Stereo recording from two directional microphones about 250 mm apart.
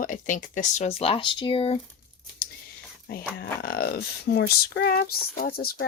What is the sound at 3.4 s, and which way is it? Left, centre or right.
Speech, left.